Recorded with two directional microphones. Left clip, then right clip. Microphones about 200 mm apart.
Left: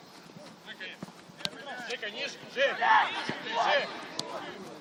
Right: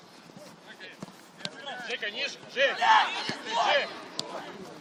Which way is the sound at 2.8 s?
60° right (ahead or behind).